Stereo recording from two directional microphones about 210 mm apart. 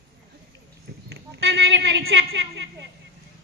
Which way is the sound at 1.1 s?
55° right (ahead or behind).